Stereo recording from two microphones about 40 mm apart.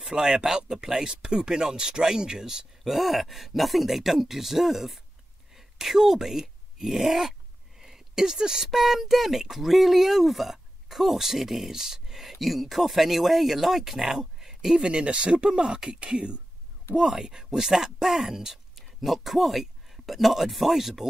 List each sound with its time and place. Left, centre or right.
0.1 s speech: centre
7.8 s a sound: centre
8.6 s speech: centre
14.8 s speech: right
16.9 s speech: centre